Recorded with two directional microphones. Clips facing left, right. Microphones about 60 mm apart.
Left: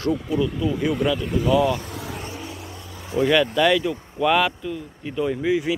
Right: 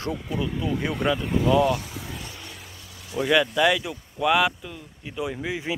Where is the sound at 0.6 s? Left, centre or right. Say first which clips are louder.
Left 3 dB; right.